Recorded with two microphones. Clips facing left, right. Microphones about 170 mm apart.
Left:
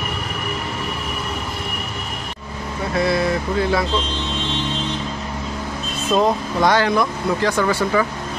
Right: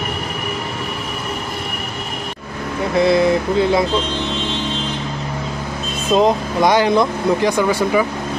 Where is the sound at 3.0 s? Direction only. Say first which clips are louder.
Right 5 dB; 20° right (ahead or behind).